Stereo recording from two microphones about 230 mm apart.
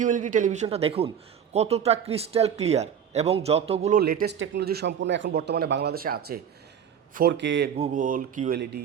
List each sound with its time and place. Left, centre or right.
0.0 s a man's voice: right
4.0 s speech: right
7.8 s a man's voice: right